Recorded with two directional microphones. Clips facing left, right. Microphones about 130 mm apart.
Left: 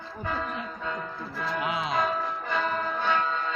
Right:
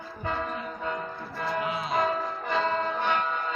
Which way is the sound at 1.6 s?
85° left.